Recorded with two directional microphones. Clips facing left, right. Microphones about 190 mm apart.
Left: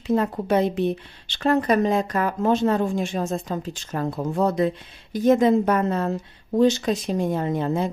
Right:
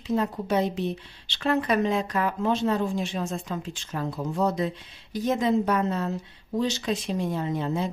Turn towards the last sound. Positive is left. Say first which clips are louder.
# left 4 dB
turn(degrees=50)  # may be behind; listen again after turning